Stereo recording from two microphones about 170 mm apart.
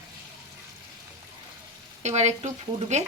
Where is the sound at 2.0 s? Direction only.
40° right (ahead or behind).